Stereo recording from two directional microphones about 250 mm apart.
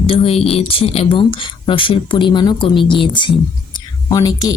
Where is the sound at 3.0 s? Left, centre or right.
Centre.